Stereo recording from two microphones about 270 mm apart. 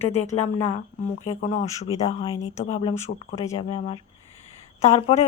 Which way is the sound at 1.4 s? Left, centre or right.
Left.